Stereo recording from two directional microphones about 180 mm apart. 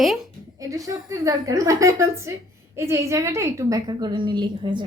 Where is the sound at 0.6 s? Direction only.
20° right (ahead or behind).